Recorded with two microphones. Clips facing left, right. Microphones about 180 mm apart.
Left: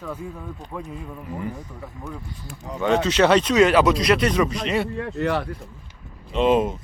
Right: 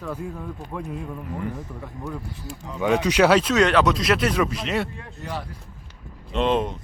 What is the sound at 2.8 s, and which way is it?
Speech, 10° right (ahead or behind).